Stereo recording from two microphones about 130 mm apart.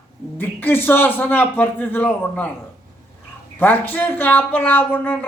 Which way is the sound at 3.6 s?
15° left (ahead or behind).